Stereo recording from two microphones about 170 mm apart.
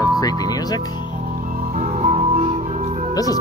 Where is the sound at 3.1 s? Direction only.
20° left (ahead or behind).